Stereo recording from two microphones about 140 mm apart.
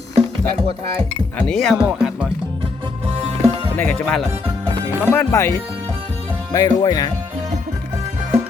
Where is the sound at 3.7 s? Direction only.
5° left (ahead or behind).